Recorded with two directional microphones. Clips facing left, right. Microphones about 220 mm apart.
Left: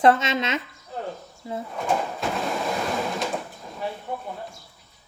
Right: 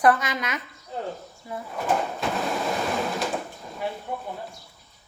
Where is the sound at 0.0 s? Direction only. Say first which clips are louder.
Left 2 dB; 25° left (ahead or behind).